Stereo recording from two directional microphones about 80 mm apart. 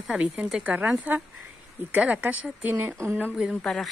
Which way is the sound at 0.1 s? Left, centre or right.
Centre.